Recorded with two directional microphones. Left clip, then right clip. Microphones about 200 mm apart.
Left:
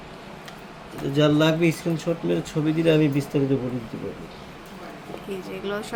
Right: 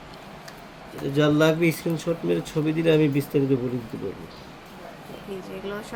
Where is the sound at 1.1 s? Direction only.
10° right (ahead or behind).